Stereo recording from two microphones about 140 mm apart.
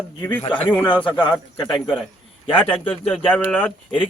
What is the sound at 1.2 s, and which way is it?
Speech, 35° left (ahead or behind).